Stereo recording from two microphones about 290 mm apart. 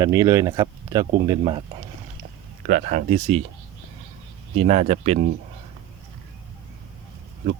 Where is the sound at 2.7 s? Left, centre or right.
Right.